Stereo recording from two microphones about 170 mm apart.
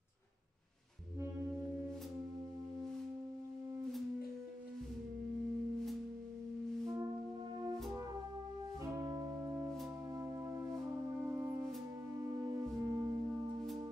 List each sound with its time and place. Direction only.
8.9 s music: 20° right (ahead or behind)